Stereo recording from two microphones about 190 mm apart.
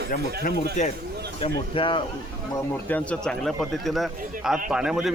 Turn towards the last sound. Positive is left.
turn(degrees=-5)  # may be behind; listen again after turning